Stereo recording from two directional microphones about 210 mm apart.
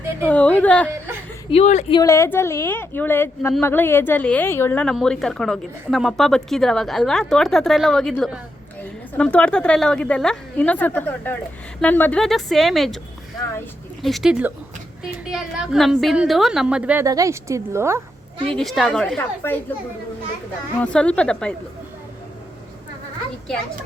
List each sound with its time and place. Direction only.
0.3 s a woman's voice: 5° left (ahead or behind)
1.5 s speech: 30° left (ahead or behind)
2.0 s a woman's voice: 15° left (ahead or behind)
14.0 s a woman's voice: centre (ahead or behind)
18.4 s a woman's voice: centre (ahead or behind)
20.7 s a woman's voice: 5° left (ahead or behind)